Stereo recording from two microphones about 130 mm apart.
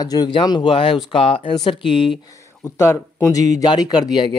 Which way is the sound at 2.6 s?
20° left (ahead or behind).